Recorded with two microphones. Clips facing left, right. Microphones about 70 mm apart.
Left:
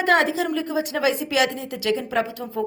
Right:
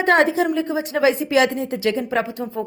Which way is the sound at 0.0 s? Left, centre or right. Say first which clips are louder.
Right 3 dB; right.